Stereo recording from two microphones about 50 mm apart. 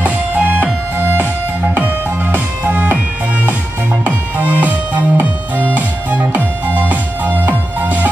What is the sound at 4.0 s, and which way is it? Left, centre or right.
Music, right.